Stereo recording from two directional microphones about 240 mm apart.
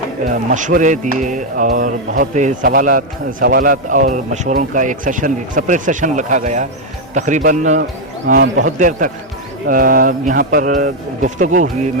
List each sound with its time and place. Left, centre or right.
0.5 s speech: right